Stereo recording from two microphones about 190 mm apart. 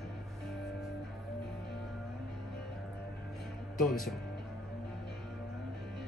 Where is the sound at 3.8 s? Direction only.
Centre (ahead or behind).